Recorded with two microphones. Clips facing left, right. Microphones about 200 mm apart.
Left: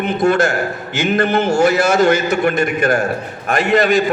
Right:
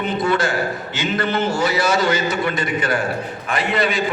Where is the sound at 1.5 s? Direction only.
45° left (ahead or behind).